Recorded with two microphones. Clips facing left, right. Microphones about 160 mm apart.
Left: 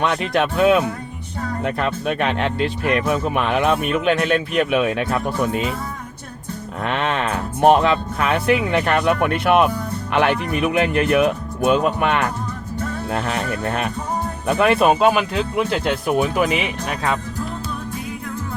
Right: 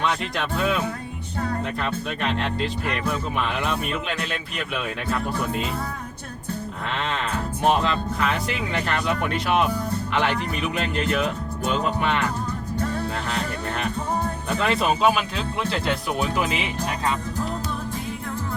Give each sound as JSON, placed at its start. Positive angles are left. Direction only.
{"t": 0.0, "sound": "speech", "side_deg": 60}
{"t": 6.8, "sound": "speech", "side_deg": 65}
{"t": 13.1, "sound": "music", "side_deg": 60}
{"t": 14.4, "sound": "speech", "side_deg": 60}